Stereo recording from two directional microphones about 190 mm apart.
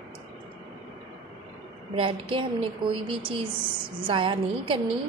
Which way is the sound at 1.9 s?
30° right (ahead or behind).